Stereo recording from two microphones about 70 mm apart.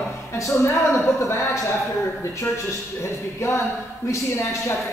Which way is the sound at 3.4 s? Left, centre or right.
Left.